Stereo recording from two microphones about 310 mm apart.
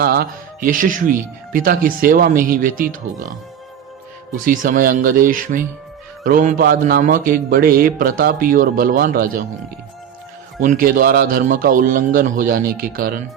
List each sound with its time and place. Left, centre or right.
0.0 s a man's voice: right
4.4 s a man's voice: right
10.6 s a man's voice: right